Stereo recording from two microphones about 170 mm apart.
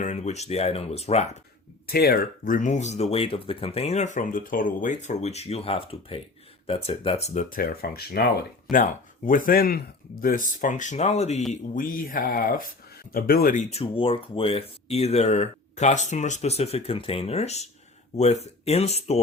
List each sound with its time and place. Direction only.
0.0 s speech: 45° left (ahead or behind)
1.9 s speech: 65° left (ahead or behind); by 7.4 s 40° left (ahead or behind)
7.5 s speech: 60° left (ahead or behind)
8.7 s speech: 50° left (ahead or behind)
11.7 s speech: 55° left (ahead or behind)
13.7 s speech: 35° left (ahead or behind)